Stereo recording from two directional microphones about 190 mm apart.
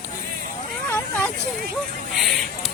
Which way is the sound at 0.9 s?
5° left (ahead or behind).